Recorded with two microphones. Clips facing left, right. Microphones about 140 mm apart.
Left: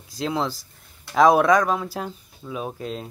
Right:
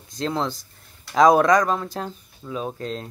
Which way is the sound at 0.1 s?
5° left (ahead or behind).